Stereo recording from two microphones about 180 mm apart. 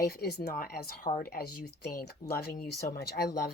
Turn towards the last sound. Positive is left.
turn(degrees=65)  # may be behind; listen again after turning